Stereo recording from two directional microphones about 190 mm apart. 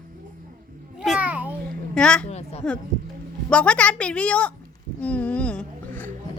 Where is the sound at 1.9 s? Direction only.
5° left (ahead or behind).